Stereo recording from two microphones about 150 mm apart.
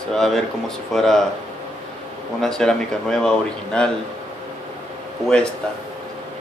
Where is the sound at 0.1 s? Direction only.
5° left (ahead or behind).